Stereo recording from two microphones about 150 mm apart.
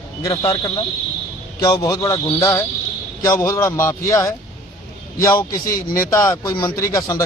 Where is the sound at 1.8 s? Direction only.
20° left (ahead or behind).